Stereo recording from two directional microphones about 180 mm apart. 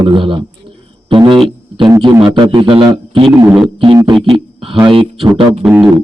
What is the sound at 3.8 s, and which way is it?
A man's voice, 25° right (ahead or behind).